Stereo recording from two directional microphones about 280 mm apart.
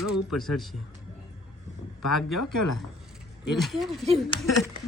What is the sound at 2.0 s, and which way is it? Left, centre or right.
Speech, left.